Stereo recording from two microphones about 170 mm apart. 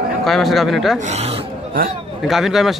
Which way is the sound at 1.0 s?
40° right (ahead or behind).